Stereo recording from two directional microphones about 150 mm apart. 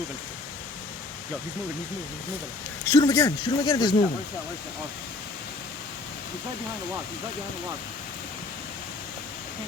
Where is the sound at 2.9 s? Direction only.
20° left (ahead or behind).